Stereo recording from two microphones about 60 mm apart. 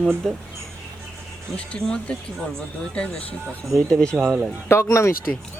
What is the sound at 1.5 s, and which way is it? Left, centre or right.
Speech, centre.